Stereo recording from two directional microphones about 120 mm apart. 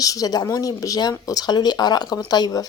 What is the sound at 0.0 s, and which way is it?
Speech, 30° left (ahead or behind).